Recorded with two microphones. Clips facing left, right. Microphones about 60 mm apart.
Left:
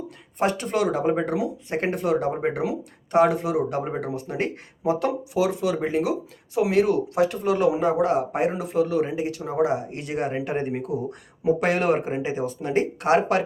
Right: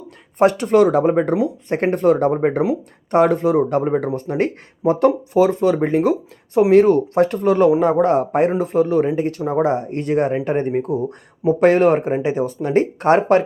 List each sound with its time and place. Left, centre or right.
0.3 s speech: right